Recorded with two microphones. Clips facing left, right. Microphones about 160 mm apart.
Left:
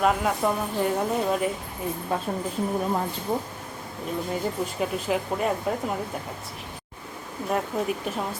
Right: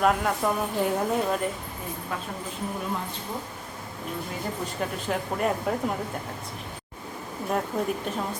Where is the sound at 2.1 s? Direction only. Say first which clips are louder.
Left 6 dB; 30° left (ahead or behind).